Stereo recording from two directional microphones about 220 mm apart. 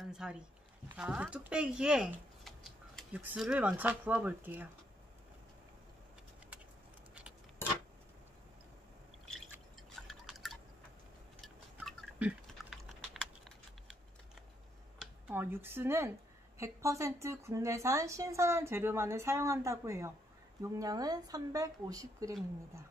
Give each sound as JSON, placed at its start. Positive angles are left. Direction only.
{"t": 0.1, "sound": "speech", "side_deg": 0}
{"t": 9.9, "sound": "drip", "side_deg": 0}
{"t": 11.4, "sound": "typing", "side_deg": 0}
{"t": 15.0, "sound": "a woman's voice", "side_deg": -5}